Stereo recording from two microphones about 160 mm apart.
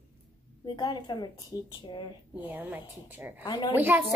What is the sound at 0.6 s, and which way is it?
A woman's voice, 25° left (ahead or behind).